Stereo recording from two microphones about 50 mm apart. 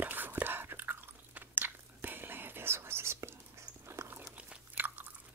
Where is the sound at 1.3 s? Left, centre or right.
Right.